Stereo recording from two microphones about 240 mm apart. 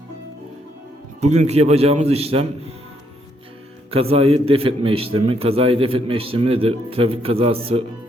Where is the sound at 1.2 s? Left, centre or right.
Right.